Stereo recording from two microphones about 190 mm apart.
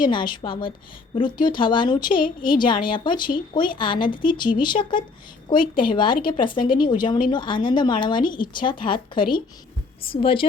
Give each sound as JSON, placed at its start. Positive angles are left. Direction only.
{"t": 0.0, "sound": "speech", "side_deg": 25}